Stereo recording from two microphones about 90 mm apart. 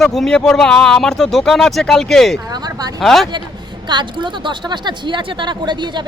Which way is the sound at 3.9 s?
60° right (ahead or behind).